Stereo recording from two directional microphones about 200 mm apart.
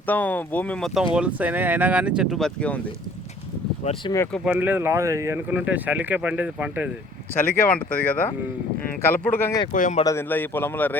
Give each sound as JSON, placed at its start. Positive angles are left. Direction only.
{"t": 0.0, "sound": "speech", "side_deg": 10}
{"t": 1.1, "sound": "speech", "side_deg": -5}
{"t": 3.8, "sound": "speech", "side_deg": 35}
{"t": 4.5, "sound": "speech", "side_deg": -10}
{"t": 7.3, "sound": "speech", "side_deg": 10}
{"t": 9.7, "sound": "speech", "side_deg": 40}
{"t": 10.0, "sound": "speech", "side_deg": 15}